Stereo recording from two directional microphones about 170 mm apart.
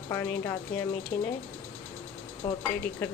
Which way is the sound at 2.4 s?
10° left (ahead or behind).